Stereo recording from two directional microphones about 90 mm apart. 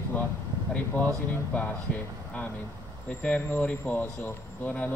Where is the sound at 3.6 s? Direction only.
15° left (ahead or behind).